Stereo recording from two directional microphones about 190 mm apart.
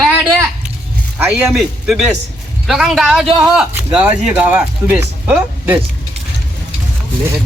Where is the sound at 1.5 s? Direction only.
Centre (ahead or behind).